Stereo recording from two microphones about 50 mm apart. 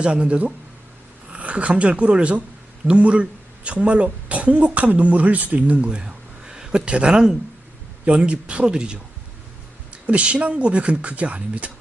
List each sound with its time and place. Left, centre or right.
0.0 s speech: right